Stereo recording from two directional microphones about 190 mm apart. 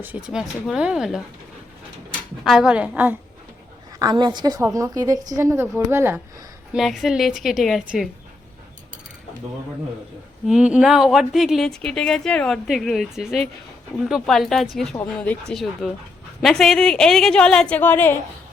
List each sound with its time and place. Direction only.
0.0 s speech: 5° right (ahead or behind)
2.4 s a woman's voice: centre (ahead or behind)
4.0 s a woman's voice: 25° right (ahead or behind)
6.7 s speech: centre (ahead or behind)
10.4 s speech: 5° right (ahead or behind)